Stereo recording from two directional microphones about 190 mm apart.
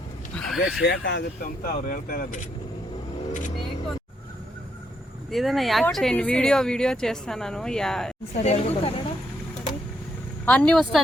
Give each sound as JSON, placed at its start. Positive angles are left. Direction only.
{"t": 0.3, "sound": "a sound", "side_deg": 0}
{"t": 0.9, "sound": "speech", "side_deg": 65}
{"t": 5.3, "sound": "speech", "side_deg": 0}
{"t": 8.4, "sound": "speech", "side_deg": 35}
{"t": 10.4, "sound": "speech", "side_deg": 5}